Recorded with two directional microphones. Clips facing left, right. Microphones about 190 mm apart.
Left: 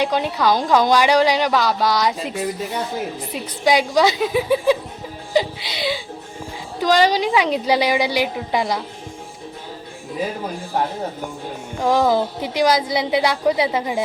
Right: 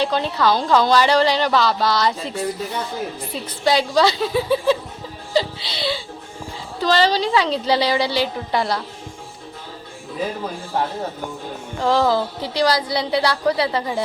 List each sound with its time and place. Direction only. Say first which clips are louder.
0.0 s a woman's voice: even; 15° left (ahead or behind)
11.8 s a woman's voice: left 1 dB; 15° left (ahead or behind)